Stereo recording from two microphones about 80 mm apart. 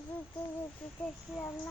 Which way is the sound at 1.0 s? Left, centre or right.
Left.